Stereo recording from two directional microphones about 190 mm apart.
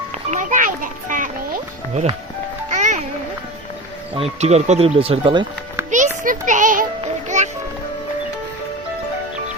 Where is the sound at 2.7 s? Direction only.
40° right (ahead or behind).